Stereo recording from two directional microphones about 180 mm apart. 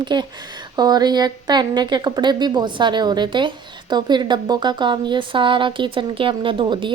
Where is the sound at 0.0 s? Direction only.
25° right (ahead or behind).